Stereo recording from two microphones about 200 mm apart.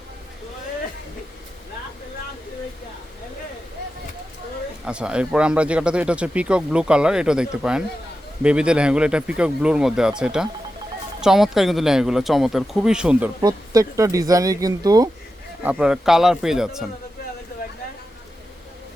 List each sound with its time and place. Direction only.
4.9 s speech: 5° right (ahead or behind)
13.4 s speech: 20° right (ahead or behind)
15.6 s speech: 5° right (ahead or behind)